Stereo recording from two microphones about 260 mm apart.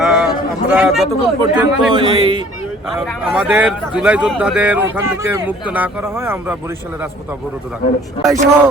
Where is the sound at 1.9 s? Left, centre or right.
Centre.